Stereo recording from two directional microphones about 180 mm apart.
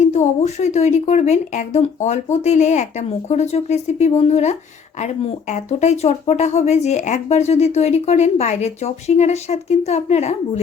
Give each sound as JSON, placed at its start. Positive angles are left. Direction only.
{"t": 0.0, "sound": "speech", "side_deg": 40}